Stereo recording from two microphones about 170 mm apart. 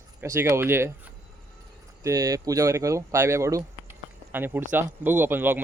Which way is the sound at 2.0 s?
20° right (ahead or behind).